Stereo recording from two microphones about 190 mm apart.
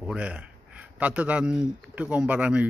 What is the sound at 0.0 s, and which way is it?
Speech, 5° right (ahead or behind).